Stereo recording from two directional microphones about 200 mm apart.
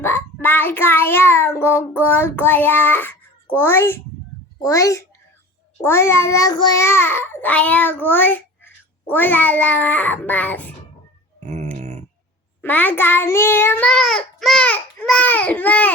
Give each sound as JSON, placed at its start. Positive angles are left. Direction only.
{"t": 0.0, "sound": "a child's voice", "side_deg": 10}
{"t": 4.6, "sound": "child singing", "side_deg": 15}
{"t": 11.3, "sound": "a sound", "side_deg": -35}
{"t": 12.6, "sound": "child singing", "side_deg": 10}